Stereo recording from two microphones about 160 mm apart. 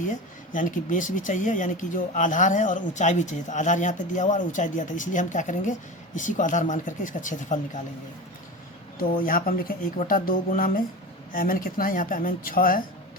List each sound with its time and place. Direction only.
0.0 s speech: 55° left (ahead or behind)
9.2 s speech: 60° left (ahead or behind)